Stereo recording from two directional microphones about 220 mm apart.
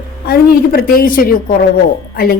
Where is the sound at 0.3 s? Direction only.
45° left (ahead or behind).